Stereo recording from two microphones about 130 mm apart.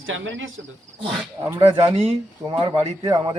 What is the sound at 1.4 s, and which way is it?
Speech, 25° right (ahead or behind).